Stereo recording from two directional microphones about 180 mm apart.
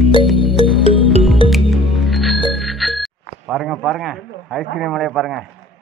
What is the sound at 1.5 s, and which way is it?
Music, centre (ahead or behind).